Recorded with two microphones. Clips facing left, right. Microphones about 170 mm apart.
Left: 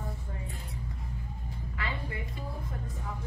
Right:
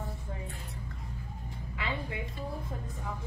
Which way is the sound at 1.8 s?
20° right (ahead or behind).